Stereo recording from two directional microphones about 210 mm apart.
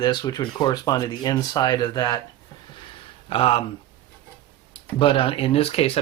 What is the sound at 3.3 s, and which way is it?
Speech, 25° left (ahead or behind).